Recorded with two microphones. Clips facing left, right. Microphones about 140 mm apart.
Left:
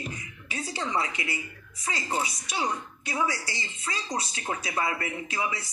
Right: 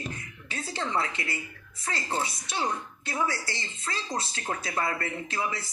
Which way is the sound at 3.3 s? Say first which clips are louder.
Even; 55° right (ahead or behind).